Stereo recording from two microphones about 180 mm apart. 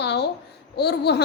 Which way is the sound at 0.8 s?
65° left (ahead or behind).